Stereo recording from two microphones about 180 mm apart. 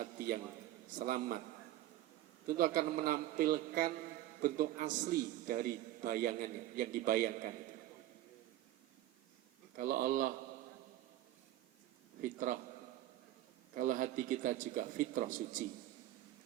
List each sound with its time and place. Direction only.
0.0 s a sound: 55° right (ahead or behind)
0.9 s a man's voice: 50° right (ahead or behind)
2.5 s a man's voice: 50° right (ahead or behind)
9.7 s a man's voice: 50° right (ahead or behind)
12.2 s a man's voice: 50° right (ahead or behind)
13.7 s a man's voice: 50° right (ahead or behind)